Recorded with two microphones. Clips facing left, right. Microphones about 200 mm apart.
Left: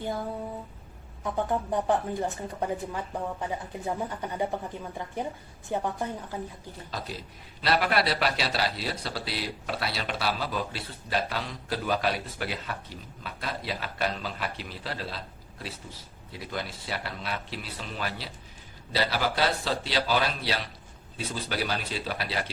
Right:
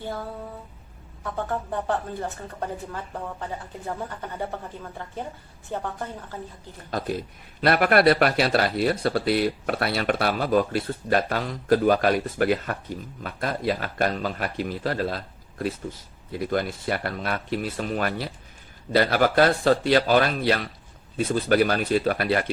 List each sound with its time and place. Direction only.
1.2 s speech: 15° left (ahead or behind)
6.9 s speech: 55° right (ahead or behind)